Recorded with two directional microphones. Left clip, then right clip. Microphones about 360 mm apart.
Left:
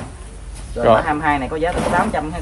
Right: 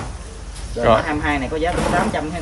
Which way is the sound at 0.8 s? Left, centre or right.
Centre.